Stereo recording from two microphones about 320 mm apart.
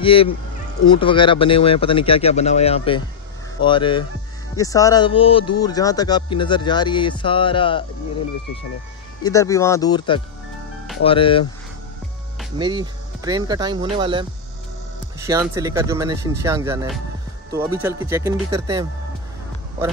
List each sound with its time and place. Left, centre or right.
0.0 s speech: centre
9.2 s speech: centre
12.5 s speech: centre